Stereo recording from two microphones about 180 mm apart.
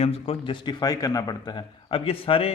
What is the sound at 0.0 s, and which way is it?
A man's voice, 35° left (ahead or behind).